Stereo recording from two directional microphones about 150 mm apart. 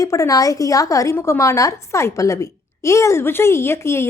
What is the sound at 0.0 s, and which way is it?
Speech, 20° left (ahead or behind).